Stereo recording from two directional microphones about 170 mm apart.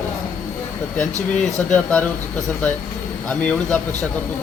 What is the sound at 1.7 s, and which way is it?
Speech, 10° left (ahead or behind).